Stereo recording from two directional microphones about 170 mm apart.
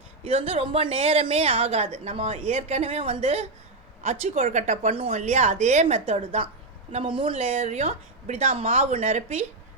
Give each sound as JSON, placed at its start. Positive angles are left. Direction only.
{"t": 0.3, "sound": "a woman's voice", "side_deg": -35}